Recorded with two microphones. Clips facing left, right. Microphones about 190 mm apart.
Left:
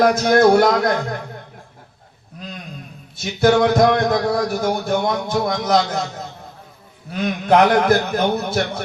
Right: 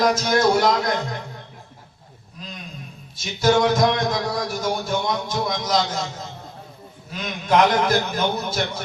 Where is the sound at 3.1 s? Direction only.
60° left (ahead or behind).